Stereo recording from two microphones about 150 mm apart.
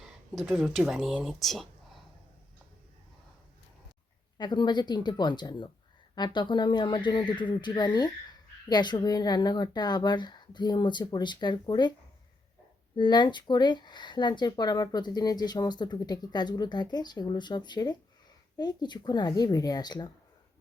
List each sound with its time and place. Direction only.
0.5 s speech: centre (ahead or behind)
4.4 s speech: 30° left (ahead or behind)
13.0 s speech: 30° left (ahead or behind)